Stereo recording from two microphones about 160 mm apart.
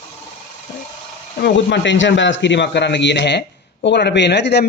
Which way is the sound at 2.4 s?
90° left.